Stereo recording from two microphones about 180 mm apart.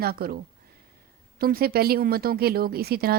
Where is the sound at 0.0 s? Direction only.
60° right (ahead or behind).